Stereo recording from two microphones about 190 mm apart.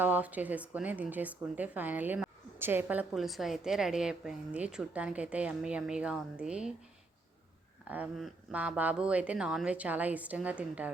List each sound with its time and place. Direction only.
0.0 s a woman's voice: 10° right (ahead or behind)
7.9 s a woman's voice: 5° right (ahead or behind)